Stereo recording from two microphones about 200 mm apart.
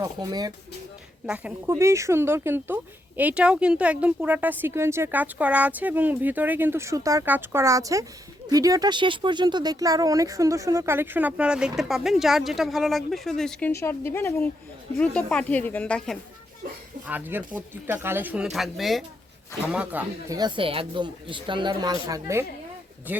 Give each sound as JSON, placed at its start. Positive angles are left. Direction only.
{"t": 0.0, "sound": "speech", "side_deg": -20}
{"t": 1.3, "sound": "a woman's voice", "side_deg": -10}
{"t": 17.1, "sound": "a woman's voice", "side_deg": -10}
{"t": 20.3, "sound": "a woman's voice", "side_deg": -25}